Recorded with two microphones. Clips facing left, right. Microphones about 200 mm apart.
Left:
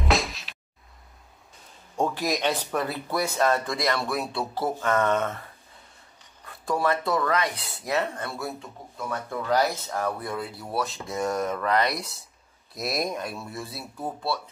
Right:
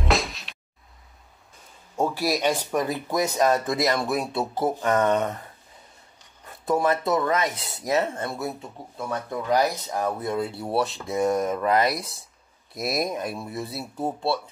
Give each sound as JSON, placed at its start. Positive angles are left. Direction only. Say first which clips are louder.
{"t": 0.0, "sound": "music", "louder": "right 1 dB", "side_deg": 0}
{"t": 2.0, "sound": "speech", "louder": "right 2 dB", "side_deg": -10}
{"t": 6.7, "sound": "speech", "louder": "right 3 dB", "side_deg": -20}
{"t": 7.5, "sound": "speech", "louder": "right 3 dB", "side_deg": -40}
{"t": 7.9, "sound": "speech", "louder": "right 3 dB", "side_deg": -20}
{"t": 10.9, "sound": "speech", "louder": "right 3 dB", "side_deg": 0}
{"t": 11.1, "sound": "speech", "louder": "right 4 dB", "side_deg": -20}
{"t": 11.8, "sound": "speech", "louder": "right 2 dB", "side_deg": 0}
{"t": 13.3, "sound": "speech", "louder": "right 4 dB", "side_deg": -20}